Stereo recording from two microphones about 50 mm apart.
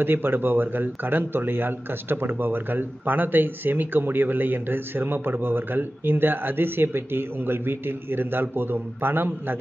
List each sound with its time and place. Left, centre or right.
0.0 s speech: right